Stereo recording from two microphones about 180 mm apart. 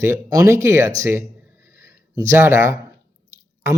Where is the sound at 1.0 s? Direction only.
15° right (ahead or behind).